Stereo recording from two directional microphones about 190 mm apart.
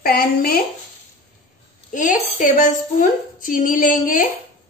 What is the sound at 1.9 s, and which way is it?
A woman's voice, 45° left (ahead or behind).